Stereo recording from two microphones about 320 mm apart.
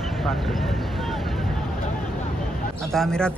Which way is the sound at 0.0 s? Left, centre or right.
Centre.